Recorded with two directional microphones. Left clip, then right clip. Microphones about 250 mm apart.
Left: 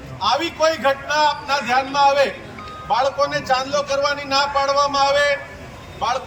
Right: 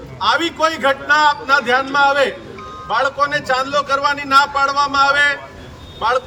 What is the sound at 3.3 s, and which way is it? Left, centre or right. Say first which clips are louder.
Speech: right 2 dB; centre.